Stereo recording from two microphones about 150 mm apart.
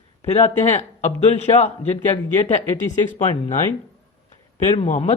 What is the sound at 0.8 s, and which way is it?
Speech, 50° left (ahead or behind).